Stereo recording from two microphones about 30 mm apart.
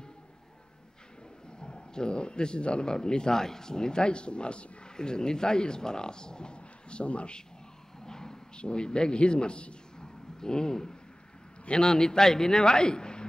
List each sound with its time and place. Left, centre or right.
1.6 s speech: left
4.9 s speech: left
8.0 s a sound: centre
8.5 s a man's voice: left
9.9 s a sound: left
11.6 s speech: left